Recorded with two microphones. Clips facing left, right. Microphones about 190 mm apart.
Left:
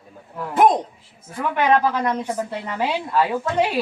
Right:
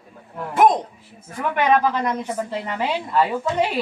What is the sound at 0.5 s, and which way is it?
Speech, 10° left (ahead or behind).